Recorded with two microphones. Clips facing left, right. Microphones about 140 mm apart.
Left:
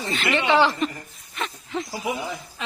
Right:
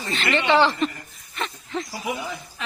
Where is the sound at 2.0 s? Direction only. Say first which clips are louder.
Left 2 dB; 20° left (ahead or behind).